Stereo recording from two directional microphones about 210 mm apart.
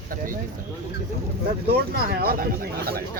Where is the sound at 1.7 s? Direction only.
50° right (ahead or behind).